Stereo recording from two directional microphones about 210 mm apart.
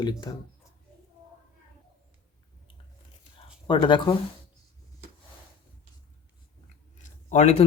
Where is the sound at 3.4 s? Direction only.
25° left (ahead or behind).